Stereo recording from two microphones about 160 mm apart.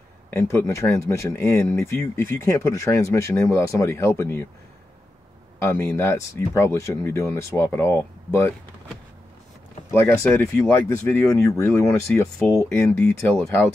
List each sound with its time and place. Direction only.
0.4 s speech: 15° left (ahead or behind)
5.6 s speech: 15° left (ahead or behind)
9.8 s speech: 15° left (ahead or behind)